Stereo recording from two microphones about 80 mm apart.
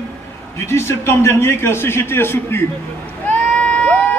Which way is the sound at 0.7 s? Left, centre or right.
Left.